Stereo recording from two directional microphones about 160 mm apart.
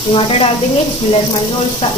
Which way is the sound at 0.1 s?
40° left (ahead or behind).